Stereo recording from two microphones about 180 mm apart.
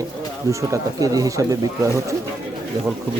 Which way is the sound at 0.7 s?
20° right (ahead or behind).